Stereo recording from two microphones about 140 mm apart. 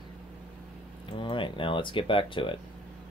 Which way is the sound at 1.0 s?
35° left (ahead or behind).